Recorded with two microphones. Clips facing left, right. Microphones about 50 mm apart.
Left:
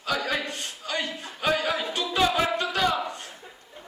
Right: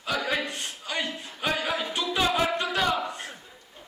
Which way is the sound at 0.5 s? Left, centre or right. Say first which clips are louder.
Left 1 dB; right.